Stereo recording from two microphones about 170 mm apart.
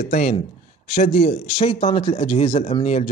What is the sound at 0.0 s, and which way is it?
A man's voice, 45° left (ahead or behind).